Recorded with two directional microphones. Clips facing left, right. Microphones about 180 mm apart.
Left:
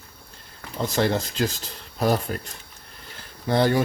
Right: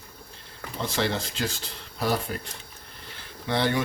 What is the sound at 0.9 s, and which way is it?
Speech, 40° left (ahead or behind).